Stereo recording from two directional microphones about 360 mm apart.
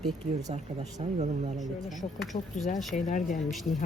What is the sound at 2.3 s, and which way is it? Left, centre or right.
Speech, centre.